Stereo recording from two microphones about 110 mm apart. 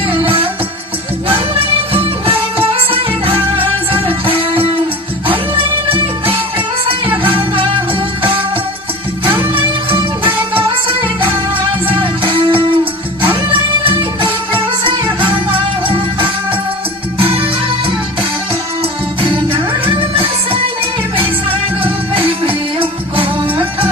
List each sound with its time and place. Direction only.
0.1 s music: 55° right (ahead or behind)
9.2 s music: 55° right (ahead or behind)
22.1 s music: 55° right (ahead or behind)